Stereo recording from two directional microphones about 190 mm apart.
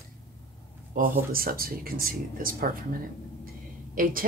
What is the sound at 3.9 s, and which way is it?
Speech, 50° right (ahead or behind).